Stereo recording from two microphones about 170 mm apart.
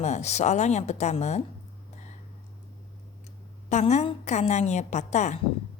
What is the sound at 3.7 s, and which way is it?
A woman's voice, 45° left (ahead or behind).